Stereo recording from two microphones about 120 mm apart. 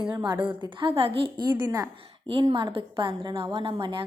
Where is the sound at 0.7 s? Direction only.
50° right (ahead or behind).